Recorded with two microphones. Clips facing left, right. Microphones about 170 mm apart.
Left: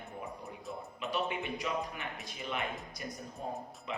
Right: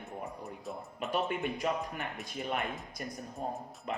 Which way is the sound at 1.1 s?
50° right (ahead or behind).